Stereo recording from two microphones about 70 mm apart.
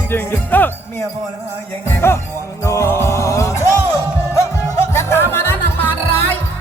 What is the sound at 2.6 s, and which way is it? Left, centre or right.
Music, left.